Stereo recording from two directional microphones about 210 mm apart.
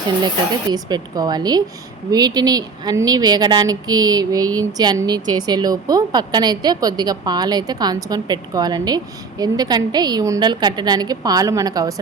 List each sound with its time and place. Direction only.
0.7 s a woman's voice: 20° right (ahead or behind)